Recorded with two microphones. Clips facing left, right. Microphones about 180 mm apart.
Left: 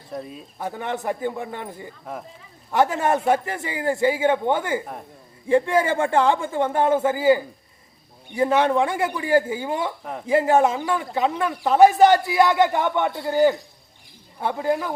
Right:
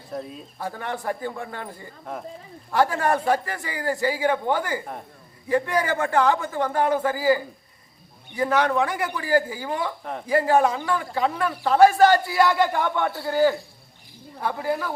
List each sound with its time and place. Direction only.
0.1 s speech: centre (ahead or behind)
0.6 s a man's voice: 20° left (ahead or behind)
10.0 s speech: 5° left (ahead or behind)
10.2 s a man's voice: 25° left (ahead or behind)